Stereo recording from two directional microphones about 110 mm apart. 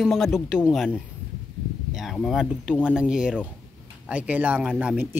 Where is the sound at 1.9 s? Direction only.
Centre (ahead or behind).